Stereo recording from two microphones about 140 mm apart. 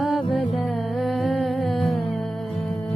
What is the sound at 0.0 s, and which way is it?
Music, centre (ahead or behind).